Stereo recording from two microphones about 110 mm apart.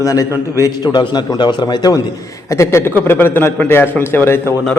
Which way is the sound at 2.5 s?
25° left (ahead or behind).